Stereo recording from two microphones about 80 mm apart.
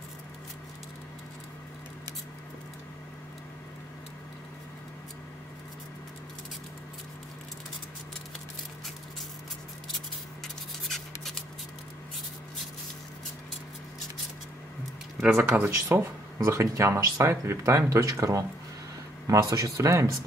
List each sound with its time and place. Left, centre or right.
10.4 s a sound: centre
15.2 s speech: right
16.4 s speech: right